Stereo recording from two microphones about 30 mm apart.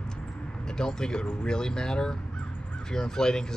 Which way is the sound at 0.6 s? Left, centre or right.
Left.